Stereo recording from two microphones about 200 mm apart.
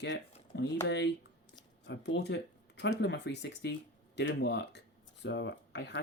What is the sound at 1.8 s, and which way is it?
Speech, 60° left (ahead or behind).